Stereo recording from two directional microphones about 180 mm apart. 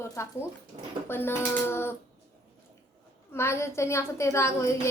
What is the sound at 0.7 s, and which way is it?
Speech, 40° right (ahead or behind).